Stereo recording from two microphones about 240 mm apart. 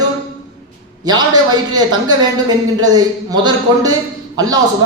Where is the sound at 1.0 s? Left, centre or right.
Centre.